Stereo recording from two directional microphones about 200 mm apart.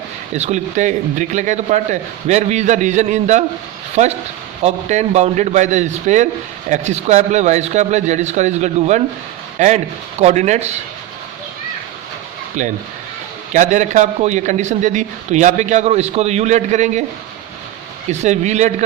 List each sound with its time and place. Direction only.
0.3 s a man's voice: 35° right (ahead or behind)
4.6 s a man's voice: 35° right (ahead or behind)
12.6 s a man's voice: 40° right (ahead or behind)
18.1 s a man's voice: 35° right (ahead or behind)